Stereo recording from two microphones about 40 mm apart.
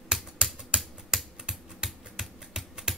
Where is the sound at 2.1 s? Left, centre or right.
Centre.